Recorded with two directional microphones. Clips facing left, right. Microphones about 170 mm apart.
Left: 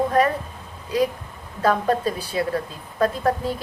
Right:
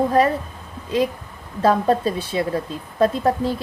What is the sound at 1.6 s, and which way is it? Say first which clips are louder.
A woman's voice: right 3 dB; 25° right (ahead or behind).